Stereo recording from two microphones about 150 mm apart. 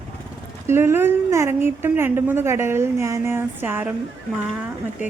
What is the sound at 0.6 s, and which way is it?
A woman's voice, 15° right (ahead or behind).